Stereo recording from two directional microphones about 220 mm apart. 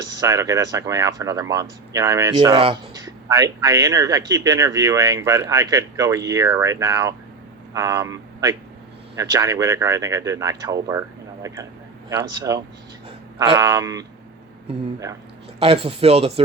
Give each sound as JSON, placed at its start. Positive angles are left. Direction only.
{"t": 0.0, "sound": "speech", "side_deg": -15}
{"t": 12.0, "sound": "speech", "side_deg": -15}
{"t": 15.6, "sound": "speech", "side_deg": -25}